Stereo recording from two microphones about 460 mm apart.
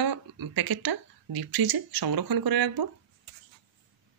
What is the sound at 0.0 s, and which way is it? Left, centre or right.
Speech, right.